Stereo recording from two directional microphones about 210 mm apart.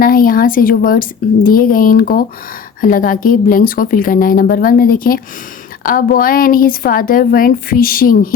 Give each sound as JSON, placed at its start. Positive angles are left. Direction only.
{"t": 0.0, "sound": "a woman's voice", "side_deg": 40}